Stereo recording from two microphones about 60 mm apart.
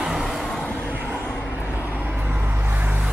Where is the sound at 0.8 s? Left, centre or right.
Right.